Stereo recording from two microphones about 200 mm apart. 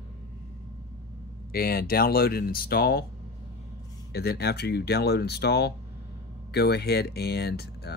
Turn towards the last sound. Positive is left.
turn(degrees=55)  # may be behind; listen again after turning